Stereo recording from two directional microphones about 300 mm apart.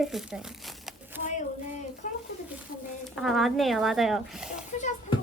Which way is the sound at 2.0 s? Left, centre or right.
Left.